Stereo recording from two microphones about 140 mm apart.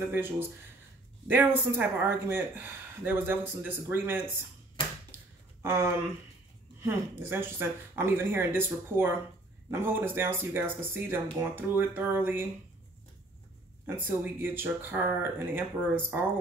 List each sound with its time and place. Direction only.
1.2 s speech: 15° right (ahead or behind)
5.6 s speech: 15° right (ahead or behind)
13.8 s speech: 15° right (ahead or behind)